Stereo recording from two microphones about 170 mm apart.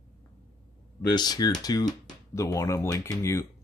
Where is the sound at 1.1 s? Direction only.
25° left (ahead or behind).